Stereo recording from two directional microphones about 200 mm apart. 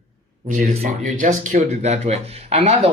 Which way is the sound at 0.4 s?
35° right (ahead or behind).